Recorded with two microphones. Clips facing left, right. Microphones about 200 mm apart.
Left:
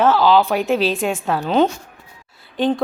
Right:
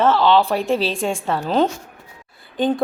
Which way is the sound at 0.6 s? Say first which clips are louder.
Left 2 dB; 30° right (ahead or behind).